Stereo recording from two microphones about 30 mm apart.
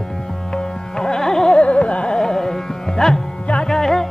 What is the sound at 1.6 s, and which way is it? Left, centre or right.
Carnatic music, left.